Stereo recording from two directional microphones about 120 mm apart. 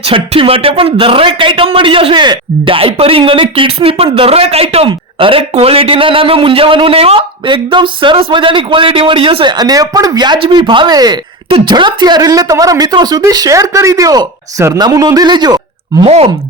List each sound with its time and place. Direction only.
0.0 s speech: 50° right (ahead or behind); by 11.2 s 35° right (ahead or behind)
11.4 s speech: 45° right (ahead or behind)
16.0 s speech: 60° right (ahead or behind)